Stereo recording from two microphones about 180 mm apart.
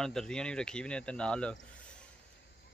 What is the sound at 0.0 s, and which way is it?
Speech, 5° left (ahead or behind).